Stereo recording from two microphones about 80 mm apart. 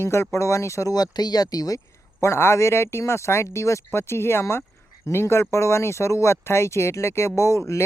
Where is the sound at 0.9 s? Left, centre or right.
Left.